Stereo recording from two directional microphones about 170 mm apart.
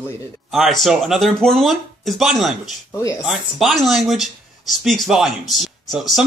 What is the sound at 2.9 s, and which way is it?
Speech, 20° left (ahead or behind).